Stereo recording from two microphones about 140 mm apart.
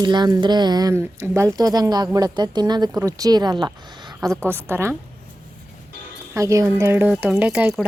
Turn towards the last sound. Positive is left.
turn(degrees=-10)  # may be behind; listen again after turning